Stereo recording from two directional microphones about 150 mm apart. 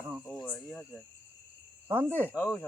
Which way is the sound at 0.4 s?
5° left (ahead or behind).